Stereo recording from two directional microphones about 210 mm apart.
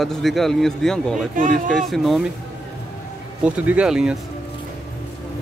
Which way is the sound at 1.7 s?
Centre (ahead or behind).